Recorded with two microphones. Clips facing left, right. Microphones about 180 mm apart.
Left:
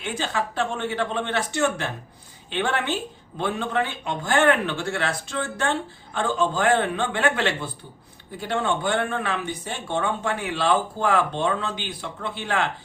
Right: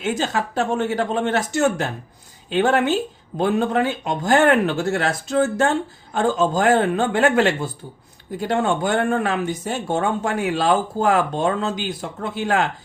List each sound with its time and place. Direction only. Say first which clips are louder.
0.0 s speech: right 5 dB; 45° right (ahead or behind)